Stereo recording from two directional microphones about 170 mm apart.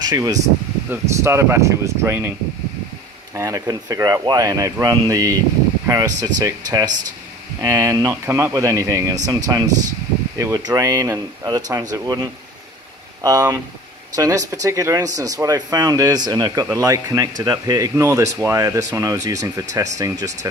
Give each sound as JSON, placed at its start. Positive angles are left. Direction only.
{"t": 0.0, "sound": "speech", "side_deg": -20}
{"t": 3.3, "sound": "speech", "side_deg": -15}